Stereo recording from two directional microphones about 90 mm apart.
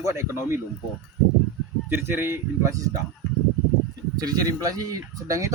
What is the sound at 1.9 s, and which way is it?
Speech, 25° right (ahead or behind).